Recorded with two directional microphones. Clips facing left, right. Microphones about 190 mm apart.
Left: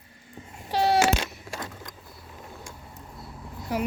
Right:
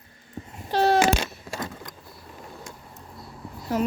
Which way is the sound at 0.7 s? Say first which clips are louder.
Right 3 dB; 10° left (ahead or behind).